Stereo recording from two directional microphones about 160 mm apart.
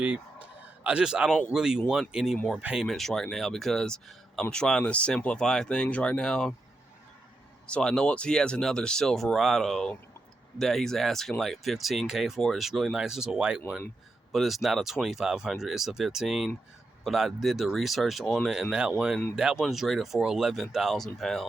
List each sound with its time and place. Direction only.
0.0 s speech: 10° right (ahead or behind)
7.7 s speech: 5° left (ahead or behind)